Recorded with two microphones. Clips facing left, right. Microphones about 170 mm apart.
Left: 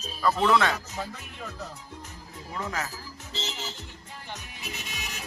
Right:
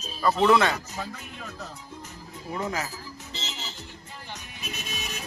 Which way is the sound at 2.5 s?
15° right (ahead or behind).